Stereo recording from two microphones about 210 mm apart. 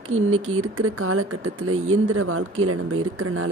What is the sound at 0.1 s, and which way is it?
Speech, 85° right.